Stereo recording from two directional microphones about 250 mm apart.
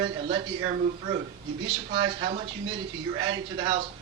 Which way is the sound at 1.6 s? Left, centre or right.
Centre.